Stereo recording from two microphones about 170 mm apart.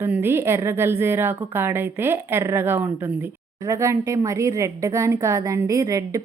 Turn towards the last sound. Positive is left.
turn(degrees=-20)  # may be behind; listen again after turning